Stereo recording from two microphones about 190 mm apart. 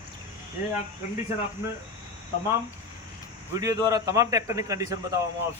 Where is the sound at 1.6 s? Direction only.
15° right (ahead or behind).